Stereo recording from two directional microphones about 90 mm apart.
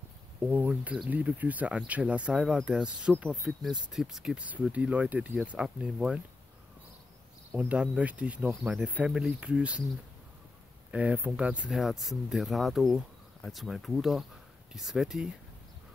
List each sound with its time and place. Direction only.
0.4 s speech: 20° right (ahead or behind)
3.4 s speech: centre (ahead or behind)
7.5 s speech: 15° right (ahead or behind)
10.9 s speech: 15° right (ahead or behind)